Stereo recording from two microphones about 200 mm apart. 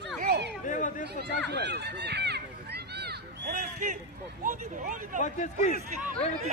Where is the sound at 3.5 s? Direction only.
40° right (ahead or behind).